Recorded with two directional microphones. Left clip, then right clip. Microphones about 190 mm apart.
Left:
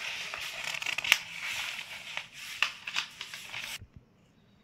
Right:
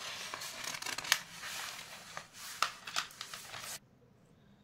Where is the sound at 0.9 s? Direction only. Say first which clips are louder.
Left 7 dB; 20° right (ahead or behind).